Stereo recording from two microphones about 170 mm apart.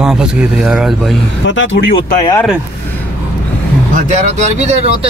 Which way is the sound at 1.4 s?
90° left.